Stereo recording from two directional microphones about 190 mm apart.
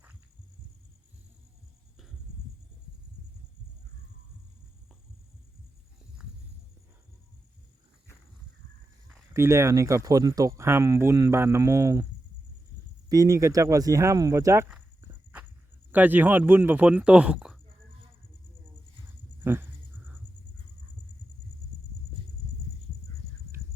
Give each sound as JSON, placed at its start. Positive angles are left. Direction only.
{"t": 9.3, "sound": "speech", "side_deg": -15}
{"t": 13.1, "sound": "speech", "side_deg": -15}
{"t": 15.9, "sound": "speech", "side_deg": -10}
{"t": 19.4, "sound": "a sound", "side_deg": -10}